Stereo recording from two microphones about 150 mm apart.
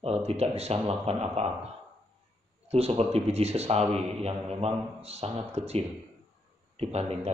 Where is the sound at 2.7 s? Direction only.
40° right (ahead or behind).